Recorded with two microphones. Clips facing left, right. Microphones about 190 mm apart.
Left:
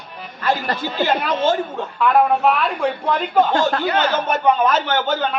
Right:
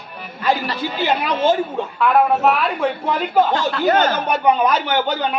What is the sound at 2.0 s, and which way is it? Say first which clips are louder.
Speech: even; centre (ahead or behind).